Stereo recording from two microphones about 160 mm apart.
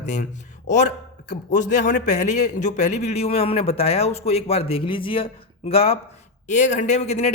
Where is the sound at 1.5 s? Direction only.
50° left (ahead or behind).